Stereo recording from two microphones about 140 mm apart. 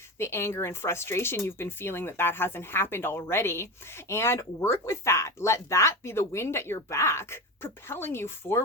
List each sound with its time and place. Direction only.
0.2 s speech: 20° left (ahead or behind)